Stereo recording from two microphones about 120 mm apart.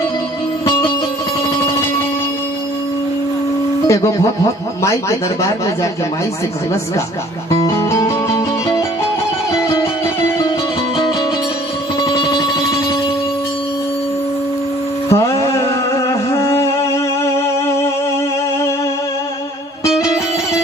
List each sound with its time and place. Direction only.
3.8 s speech: 25° left (ahead or behind)
7.6 s music: 25° left (ahead or behind)
12.0 s music: 35° left (ahead or behind)
15.1 s music: 25° left (ahead or behind)
20.0 s music: 25° left (ahead or behind)